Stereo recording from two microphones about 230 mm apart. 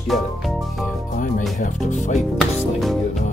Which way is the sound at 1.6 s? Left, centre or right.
Left.